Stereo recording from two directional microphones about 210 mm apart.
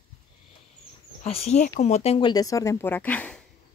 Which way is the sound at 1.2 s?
30° left (ahead or behind).